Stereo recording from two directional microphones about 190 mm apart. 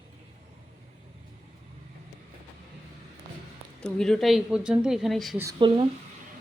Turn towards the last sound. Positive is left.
turn(degrees=-25)  # may be behind; listen again after turning